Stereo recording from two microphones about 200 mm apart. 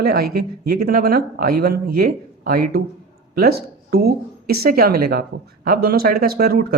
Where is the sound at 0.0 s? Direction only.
50° right (ahead or behind).